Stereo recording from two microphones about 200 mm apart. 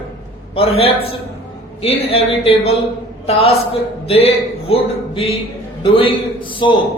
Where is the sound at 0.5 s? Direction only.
30° left (ahead or behind).